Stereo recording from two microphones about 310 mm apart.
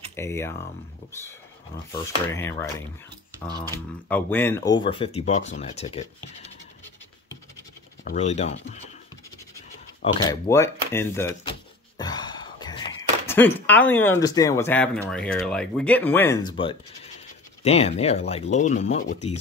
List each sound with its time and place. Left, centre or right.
0.1 s speech: centre
1.9 s speech: centre
3.7 s speech: centre
8.0 s speech: left
10.0 s speech: centre